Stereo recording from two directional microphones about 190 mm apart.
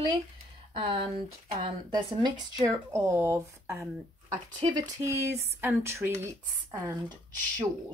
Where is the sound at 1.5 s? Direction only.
25° right (ahead or behind).